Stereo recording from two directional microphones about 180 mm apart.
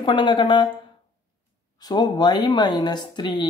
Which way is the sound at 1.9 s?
25° left (ahead or behind).